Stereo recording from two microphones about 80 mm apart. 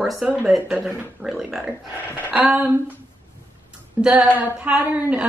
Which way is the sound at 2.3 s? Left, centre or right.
Centre.